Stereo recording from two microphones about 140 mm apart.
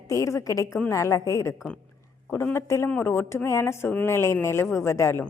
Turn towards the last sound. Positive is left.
turn(degrees=20)  # may be behind; listen again after turning